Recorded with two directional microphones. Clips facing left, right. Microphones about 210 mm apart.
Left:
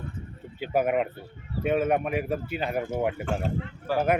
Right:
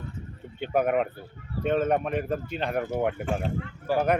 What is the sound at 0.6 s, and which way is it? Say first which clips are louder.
A man's voice: even; 5° left (ahead or behind).